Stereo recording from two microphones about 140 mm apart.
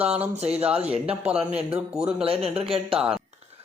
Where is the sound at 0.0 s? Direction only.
10° right (ahead or behind).